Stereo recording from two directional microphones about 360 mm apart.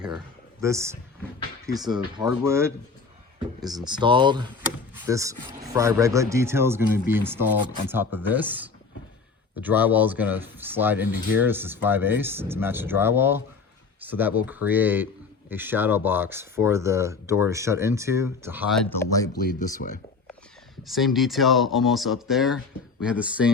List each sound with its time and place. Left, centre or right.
0.6 s speech: centre
19.3 s speech: left
20.8 s speech: centre